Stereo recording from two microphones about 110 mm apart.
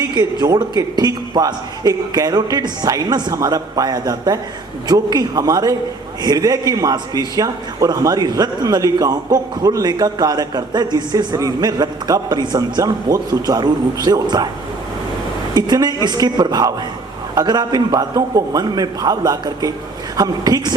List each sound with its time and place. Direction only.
0.1 s a man's voice: 40° right (ahead or behind)
15.5 s a man's voice: 40° right (ahead or behind)